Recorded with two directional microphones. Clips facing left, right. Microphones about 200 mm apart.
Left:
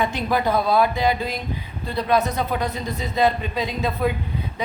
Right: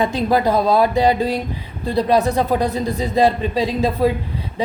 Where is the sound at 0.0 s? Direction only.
35° right (ahead or behind).